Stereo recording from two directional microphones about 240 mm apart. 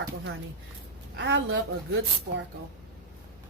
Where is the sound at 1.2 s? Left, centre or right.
Right.